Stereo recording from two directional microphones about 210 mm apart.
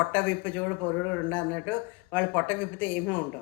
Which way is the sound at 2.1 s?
10° left (ahead or behind).